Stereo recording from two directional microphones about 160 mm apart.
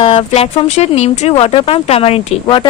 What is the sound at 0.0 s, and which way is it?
A woman's voice, 35° left (ahead or behind).